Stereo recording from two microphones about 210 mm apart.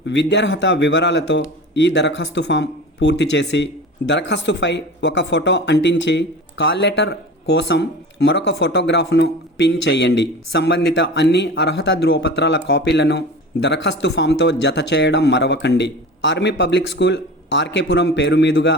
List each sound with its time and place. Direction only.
0.0 s a man's voice: 55° left (ahead or behind)